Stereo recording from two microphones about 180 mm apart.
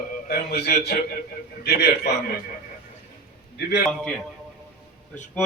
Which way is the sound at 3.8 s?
Centre (ahead or behind).